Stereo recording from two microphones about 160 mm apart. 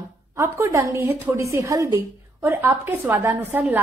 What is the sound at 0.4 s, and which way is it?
A woman's voice, 20° right (ahead or behind).